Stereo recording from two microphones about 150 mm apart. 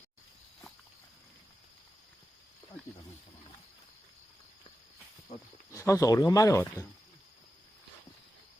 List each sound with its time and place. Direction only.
5.7 s speech: 20° left (ahead or behind)